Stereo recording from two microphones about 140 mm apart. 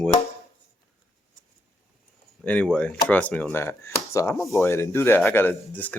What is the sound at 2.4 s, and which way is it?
Speech, 10° left (ahead or behind).